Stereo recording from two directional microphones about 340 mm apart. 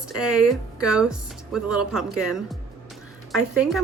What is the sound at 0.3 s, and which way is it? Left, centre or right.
A woman's voice, centre.